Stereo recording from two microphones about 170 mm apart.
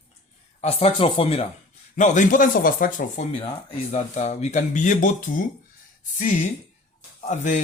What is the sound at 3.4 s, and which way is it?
Speech, 35° left (ahead or behind).